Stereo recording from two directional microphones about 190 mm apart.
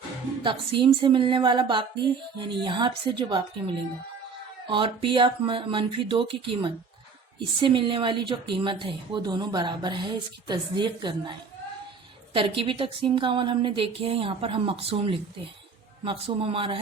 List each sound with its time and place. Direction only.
0.4 s a woman's voice: 25° right (ahead or behind)